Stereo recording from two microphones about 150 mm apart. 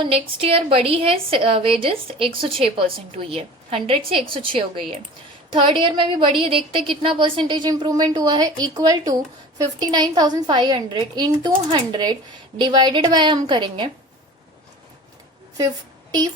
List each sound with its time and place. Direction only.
0.0 s a woman's voice: 40° right (ahead or behind)